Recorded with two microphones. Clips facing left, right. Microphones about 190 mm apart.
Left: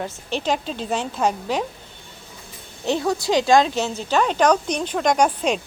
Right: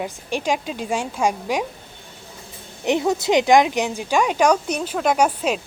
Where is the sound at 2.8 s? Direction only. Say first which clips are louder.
Right 2 dB; 20° right (ahead or behind).